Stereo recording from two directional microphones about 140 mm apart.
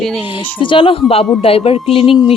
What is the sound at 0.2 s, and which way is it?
A woman's voice, 40° left (ahead or behind).